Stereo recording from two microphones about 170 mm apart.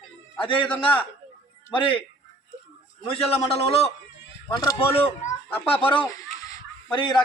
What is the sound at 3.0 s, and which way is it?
A man's voice, 35° left (ahead or behind).